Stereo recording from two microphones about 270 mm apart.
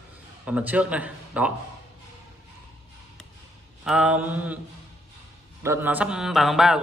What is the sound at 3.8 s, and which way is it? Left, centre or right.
Speech, centre.